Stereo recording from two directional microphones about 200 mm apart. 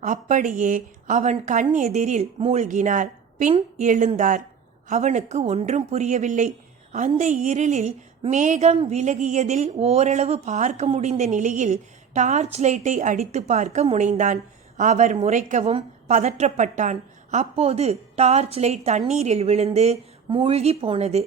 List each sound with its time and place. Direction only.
0.0 s a woman's voice: 40° right (ahead or behind)